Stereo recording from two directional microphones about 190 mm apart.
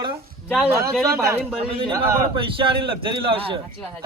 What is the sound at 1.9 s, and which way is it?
Speech, 15° right (ahead or behind).